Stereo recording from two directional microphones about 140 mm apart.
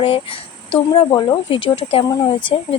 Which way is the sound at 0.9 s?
30° left (ahead or behind).